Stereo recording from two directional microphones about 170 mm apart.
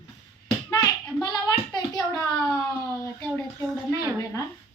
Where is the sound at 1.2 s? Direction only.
25° left (ahead or behind).